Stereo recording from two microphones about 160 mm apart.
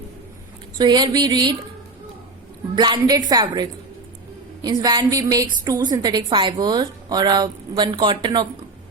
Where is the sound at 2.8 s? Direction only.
25° right (ahead or behind).